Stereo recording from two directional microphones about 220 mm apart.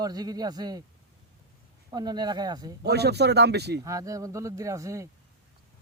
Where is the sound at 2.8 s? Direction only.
50° right (ahead or behind).